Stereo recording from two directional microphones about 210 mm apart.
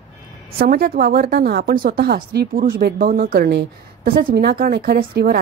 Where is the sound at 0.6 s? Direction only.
45° right (ahead or behind).